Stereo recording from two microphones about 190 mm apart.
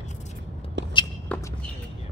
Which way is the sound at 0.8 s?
70° right (ahead or behind).